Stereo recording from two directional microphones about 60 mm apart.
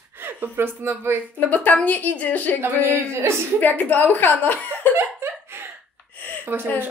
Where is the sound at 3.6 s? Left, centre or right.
Left.